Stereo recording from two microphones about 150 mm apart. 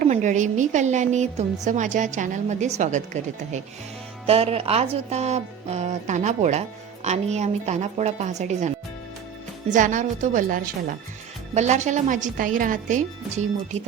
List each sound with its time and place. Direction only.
0.0 s a woman's voice: 55° right (ahead or behind)
4.3 s a woman's voice: 40° right (ahead or behind); by 10.9 s 60° right (ahead or behind)
11.5 s a woman's voice: 50° right (ahead or behind)